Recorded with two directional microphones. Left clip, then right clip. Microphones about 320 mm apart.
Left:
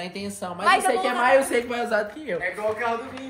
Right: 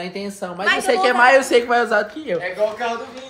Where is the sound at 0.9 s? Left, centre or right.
Right.